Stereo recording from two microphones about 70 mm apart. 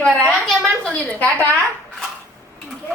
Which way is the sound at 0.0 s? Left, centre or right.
Centre.